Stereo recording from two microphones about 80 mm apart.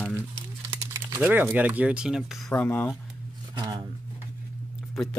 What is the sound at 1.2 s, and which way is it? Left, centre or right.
Speech, right.